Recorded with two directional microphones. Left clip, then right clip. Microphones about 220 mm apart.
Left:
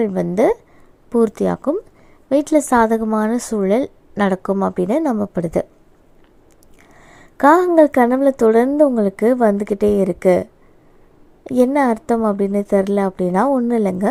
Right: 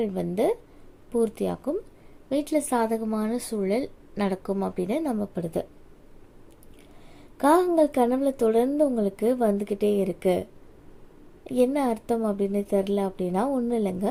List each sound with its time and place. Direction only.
0.0 s a woman's voice: 30° left (ahead or behind)
7.3 s a woman's voice: 30° left (ahead or behind)